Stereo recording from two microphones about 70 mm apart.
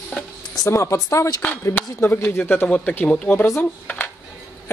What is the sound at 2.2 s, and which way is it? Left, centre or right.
Speech, left.